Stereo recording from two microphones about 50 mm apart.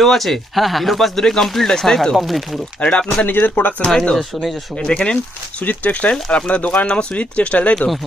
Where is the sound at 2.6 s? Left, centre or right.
Centre.